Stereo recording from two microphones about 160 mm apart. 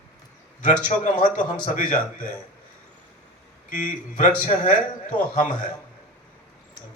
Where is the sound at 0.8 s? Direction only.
55° left (ahead or behind).